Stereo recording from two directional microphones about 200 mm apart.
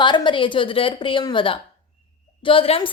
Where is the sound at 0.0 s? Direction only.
25° left (ahead or behind).